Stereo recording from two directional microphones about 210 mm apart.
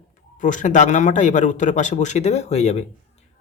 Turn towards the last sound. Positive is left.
turn(degrees=30)  # may be behind; listen again after turning